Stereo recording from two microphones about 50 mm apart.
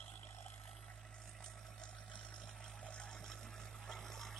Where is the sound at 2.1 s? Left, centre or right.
Left.